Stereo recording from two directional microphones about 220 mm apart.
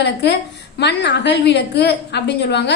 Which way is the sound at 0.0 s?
50° left (ahead or behind).